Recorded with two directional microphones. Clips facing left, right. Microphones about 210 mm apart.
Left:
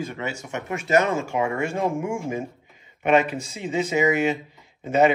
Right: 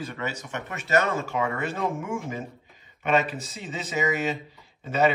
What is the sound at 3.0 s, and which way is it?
Speech, 10° left (ahead or behind).